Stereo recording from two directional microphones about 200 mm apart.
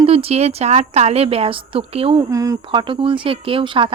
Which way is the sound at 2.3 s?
15° right (ahead or behind).